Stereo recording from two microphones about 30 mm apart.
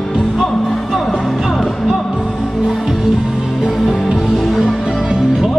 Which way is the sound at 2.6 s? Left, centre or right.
Centre.